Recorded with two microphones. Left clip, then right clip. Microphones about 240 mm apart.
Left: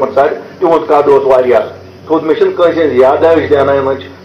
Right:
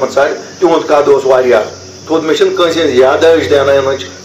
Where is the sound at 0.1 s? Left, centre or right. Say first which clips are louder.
Left 1 dB; right.